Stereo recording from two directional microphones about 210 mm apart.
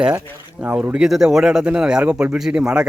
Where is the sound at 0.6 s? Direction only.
10° right (ahead or behind).